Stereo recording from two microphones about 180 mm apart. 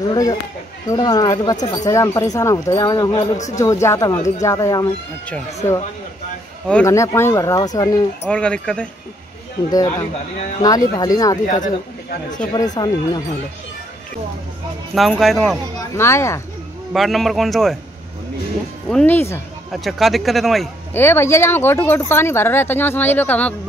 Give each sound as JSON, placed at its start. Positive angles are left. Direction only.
{"t": 0.1, "sound": "speech", "side_deg": 20}
{"t": 6.7, "sound": "speech", "side_deg": 15}
{"t": 8.3, "sound": "speech", "side_deg": 5}
{"t": 9.7, "sound": "speech", "side_deg": 20}
{"t": 11.4, "sound": "speech", "side_deg": 45}
{"t": 12.5, "sound": "speech", "side_deg": 20}
{"t": 15.0, "sound": "speech", "side_deg": 0}
{"t": 16.0, "sound": "speech", "side_deg": 15}
{"t": 16.9, "sound": "speech", "side_deg": 0}
{"t": 18.9, "sound": "speech", "side_deg": 5}
{"t": 19.7, "sound": "speech", "side_deg": 0}
{"t": 20.9, "sound": "speech", "side_deg": 10}